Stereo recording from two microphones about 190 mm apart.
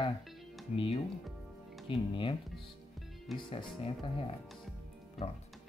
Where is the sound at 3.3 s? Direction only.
30° left (ahead or behind).